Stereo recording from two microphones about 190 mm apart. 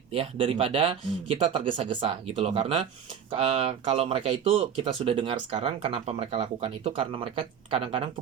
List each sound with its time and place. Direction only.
0.1 s speech: 30° right (ahead or behind)